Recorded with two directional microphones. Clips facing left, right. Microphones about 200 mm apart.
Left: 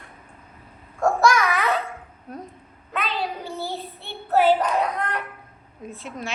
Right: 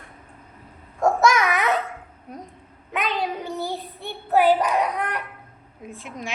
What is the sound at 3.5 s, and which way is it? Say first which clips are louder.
Child singing: right 2 dB; 15° right (ahead or behind).